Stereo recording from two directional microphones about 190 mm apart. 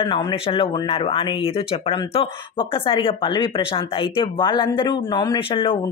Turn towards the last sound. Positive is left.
turn(degrees=25)  # may be behind; listen again after turning